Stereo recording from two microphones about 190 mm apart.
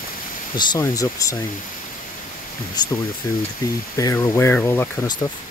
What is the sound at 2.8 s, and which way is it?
Speech, 20° left (ahead or behind).